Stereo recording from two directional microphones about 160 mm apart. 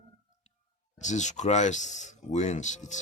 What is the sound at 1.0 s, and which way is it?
Speech, 50° left (ahead or behind).